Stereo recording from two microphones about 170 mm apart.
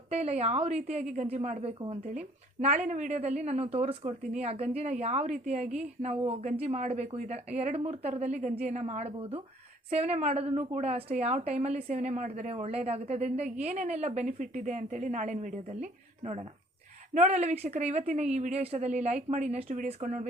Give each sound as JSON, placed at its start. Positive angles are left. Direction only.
{"t": 0.1, "sound": "a woman's voice", "side_deg": -40}
{"t": 5.6, "sound": "a woman's voice", "side_deg": -5}
{"t": 6.0, "sound": "a woman's voice", "side_deg": -40}